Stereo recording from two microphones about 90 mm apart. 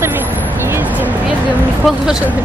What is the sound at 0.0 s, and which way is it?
Vehicle, 25° right (ahead or behind).